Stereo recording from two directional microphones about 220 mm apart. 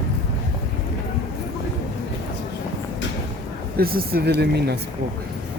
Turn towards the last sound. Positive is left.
turn(degrees=-45)  # may be behind; listen again after turning